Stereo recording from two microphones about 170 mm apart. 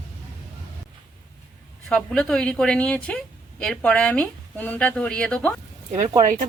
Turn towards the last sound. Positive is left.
turn(degrees=-45)  # may be behind; listen again after turning